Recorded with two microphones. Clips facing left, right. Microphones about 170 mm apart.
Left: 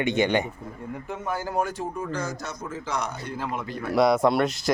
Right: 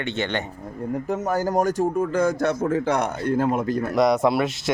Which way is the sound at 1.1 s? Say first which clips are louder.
Right 6 dB; 40° right (ahead or behind).